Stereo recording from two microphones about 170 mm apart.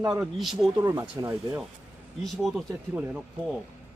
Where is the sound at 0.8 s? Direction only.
20° right (ahead or behind).